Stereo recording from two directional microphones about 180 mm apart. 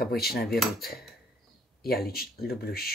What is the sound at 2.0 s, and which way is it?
Speech, 60° left (ahead or behind).